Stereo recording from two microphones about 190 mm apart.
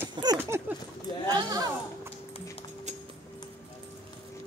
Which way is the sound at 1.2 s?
20° right (ahead or behind).